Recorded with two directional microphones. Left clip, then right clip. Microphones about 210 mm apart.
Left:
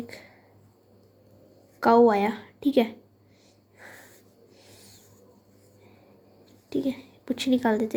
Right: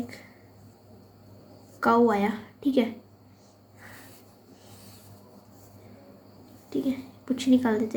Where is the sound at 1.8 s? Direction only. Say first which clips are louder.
Left 3 dB; 35° left (ahead or behind).